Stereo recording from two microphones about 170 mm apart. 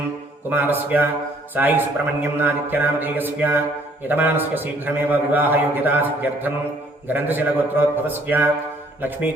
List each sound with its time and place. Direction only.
0.5 s a man's voice: 10° right (ahead or behind)